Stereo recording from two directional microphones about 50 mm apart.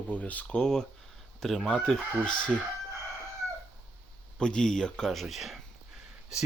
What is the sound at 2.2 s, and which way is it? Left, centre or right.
Speech, centre.